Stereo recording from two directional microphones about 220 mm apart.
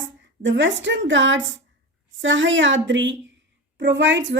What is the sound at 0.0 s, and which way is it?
A woman's voice, 55° right (ahead or behind).